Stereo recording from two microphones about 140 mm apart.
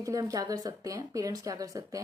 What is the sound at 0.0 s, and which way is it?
A woman's voice, 25° right (ahead or behind).